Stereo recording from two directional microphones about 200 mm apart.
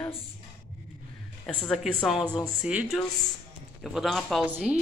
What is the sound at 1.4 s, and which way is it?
Speech, 5° left (ahead or behind).